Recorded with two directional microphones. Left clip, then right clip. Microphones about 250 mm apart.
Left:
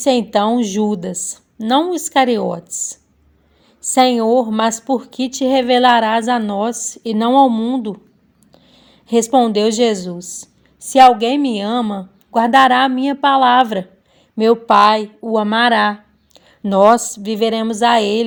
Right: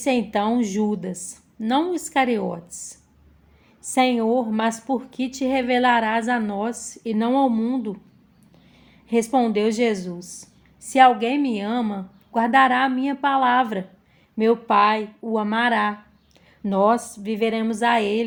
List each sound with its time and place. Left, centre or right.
0.0 s a woman's voice: left
9.0 s a woman's voice: left